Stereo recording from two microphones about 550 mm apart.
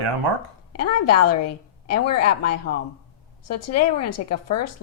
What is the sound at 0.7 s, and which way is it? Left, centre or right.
Speech, left.